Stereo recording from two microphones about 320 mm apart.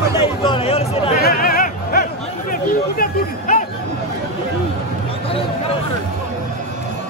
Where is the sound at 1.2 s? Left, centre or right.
Left.